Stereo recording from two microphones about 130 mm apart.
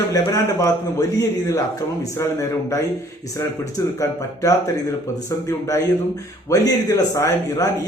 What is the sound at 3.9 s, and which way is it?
A man's voice, 25° left (ahead or behind).